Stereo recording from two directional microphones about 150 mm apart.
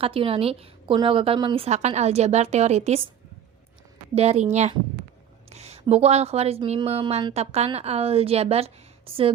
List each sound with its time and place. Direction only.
0.0 s a woman's voice: 35° right (ahead or behind)
4.1 s a woman's voice: 45° right (ahead or behind)
5.5 s a woman's voice: 45° right (ahead or behind)